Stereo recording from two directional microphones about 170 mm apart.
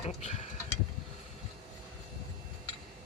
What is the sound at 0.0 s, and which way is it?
Speech, 40° left (ahead or behind).